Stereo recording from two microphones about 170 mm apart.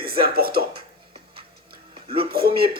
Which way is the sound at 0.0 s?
65° right (ahead or behind).